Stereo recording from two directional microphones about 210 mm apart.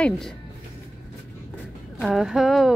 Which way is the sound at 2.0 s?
Centre (ahead or behind).